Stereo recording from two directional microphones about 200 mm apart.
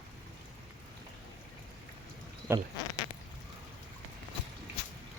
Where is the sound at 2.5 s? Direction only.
10° right (ahead or behind).